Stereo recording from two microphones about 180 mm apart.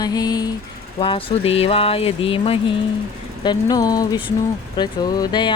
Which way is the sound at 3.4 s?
25° left (ahead or behind).